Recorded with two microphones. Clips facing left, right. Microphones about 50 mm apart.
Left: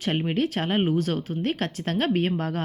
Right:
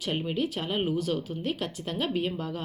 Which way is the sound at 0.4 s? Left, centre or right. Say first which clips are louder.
Left 5 dB; left.